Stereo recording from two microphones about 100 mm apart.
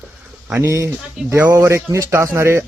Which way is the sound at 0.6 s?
25° right (ahead or behind).